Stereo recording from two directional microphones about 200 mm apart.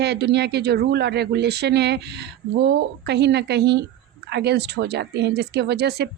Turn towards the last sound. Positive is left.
turn(degrees=-55)  # may be behind; listen again after turning